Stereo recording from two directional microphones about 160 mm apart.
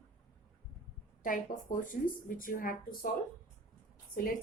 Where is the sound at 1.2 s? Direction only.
55° left (ahead or behind).